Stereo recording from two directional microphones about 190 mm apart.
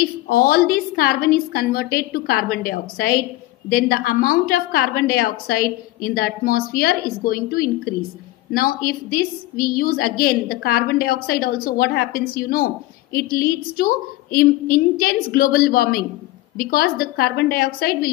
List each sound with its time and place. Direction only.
0.0 s a woman's voice: 50° left (ahead or behind)